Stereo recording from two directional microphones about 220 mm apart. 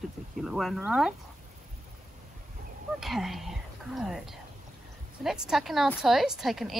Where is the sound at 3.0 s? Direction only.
Centre (ahead or behind).